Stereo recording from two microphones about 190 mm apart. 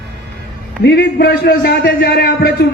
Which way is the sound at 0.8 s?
60° left (ahead or behind).